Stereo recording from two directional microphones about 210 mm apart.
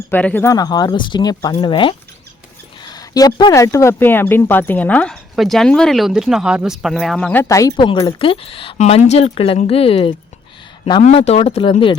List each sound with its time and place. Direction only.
0.1 s speech: 5° left (ahead or behind); by 11.9 s 25° left (ahead or behind)